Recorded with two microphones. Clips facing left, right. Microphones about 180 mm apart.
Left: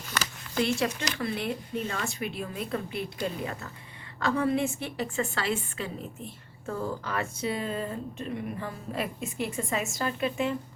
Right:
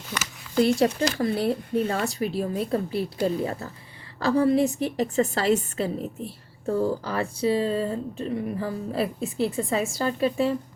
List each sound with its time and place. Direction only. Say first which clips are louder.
0.5 s a woman's voice: right 7 dB; 35° right (ahead or behind)